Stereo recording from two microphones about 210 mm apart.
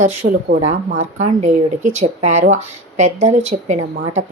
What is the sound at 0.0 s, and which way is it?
Speech, 30° right (ahead or behind).